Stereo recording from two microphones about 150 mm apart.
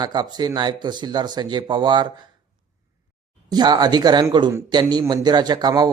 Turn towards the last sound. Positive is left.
turn(degrees=-25)  # may be behind; listen again after turning